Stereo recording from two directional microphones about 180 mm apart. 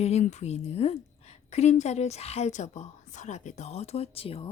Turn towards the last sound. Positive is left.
turn(degrees=30)  # may be behind; listen again after turning